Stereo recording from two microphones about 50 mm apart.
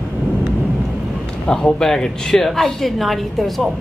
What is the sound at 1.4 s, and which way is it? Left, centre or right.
A woman's voice, centre.